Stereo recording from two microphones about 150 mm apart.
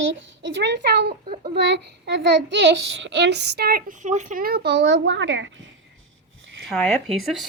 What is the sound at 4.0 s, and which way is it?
Speech, 55° right (ahead or behind).